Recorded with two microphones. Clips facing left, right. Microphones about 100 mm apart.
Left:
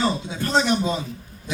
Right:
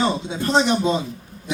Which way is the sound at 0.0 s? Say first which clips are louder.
Right 2 dB; 20° right (ahead or behind).